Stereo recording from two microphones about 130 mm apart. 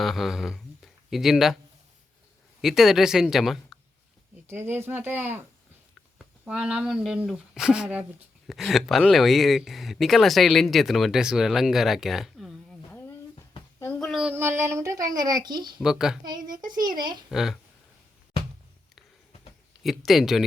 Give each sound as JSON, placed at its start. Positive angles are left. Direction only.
{"t": 0.0, "sound": "speech", "side_deg": 0}
{"t": 2.6, "sound": "speech", "side_deg": 0}
{"t": 4.4, "sound": "speech", "side_deg": -20}
{"t": 14.0, "sound": "child singing", "side_deg": -5}
{"t": 14.3, "sound": "speech", "side_deg": -20}
{"t": 15.8, "sound": "speech", "side_deg": -5}
{"t": 16.6, "sound": "speech", "side_deg": -35}
{"t": 17.3, "sound": "speech", "side_deg": -5}
{"t": 19.8, "sound": "speech", "side_deg": 0}